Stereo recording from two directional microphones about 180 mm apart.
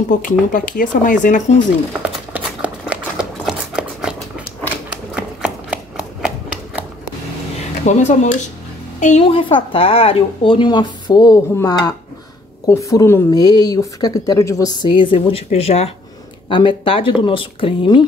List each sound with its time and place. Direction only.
0.1 s speech: 45° left (ahead or behind)
2.3 s a sound: 5° right (ahead or behind)
7.8 s speech: 40° left (ahead or behind)